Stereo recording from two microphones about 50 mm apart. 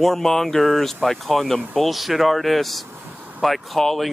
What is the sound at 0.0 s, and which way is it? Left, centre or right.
Speech, centre.